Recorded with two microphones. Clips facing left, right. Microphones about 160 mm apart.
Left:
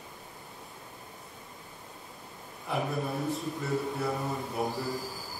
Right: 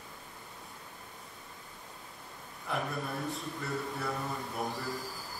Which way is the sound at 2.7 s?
Centre (ahead or behind).